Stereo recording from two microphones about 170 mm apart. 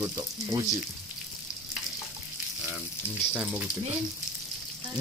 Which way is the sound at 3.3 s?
10° right (ahead or behind).